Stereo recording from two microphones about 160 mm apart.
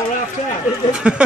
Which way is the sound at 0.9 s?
5° right (ahead or behind).